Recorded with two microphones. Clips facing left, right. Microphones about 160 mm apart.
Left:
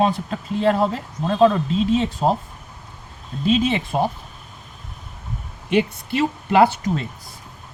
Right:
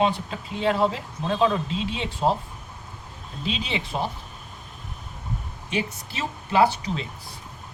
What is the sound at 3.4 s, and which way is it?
Speech, 45° left (ahead or behind).